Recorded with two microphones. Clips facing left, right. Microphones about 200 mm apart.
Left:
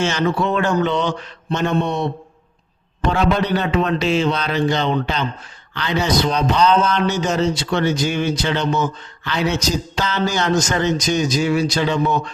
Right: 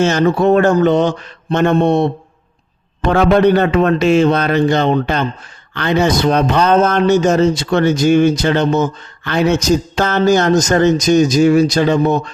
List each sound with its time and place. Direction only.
0.0 s speech: 45° right (ahead or behind)
3.1 s speech: 60° right (ahead or behind)